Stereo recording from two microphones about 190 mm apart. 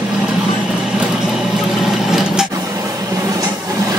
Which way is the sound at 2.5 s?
15° right (ahead or behind).